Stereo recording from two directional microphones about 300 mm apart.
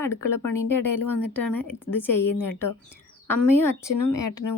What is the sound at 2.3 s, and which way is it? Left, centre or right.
Speech, left.